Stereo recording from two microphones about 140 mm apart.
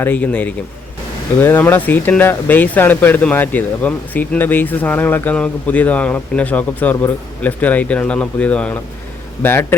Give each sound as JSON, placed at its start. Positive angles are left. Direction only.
{"t": 0.0, "sound": "speech", "side_deg": 10}